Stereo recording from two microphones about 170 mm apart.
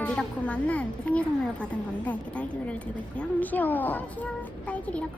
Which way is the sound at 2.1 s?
10° left (ahead or behind).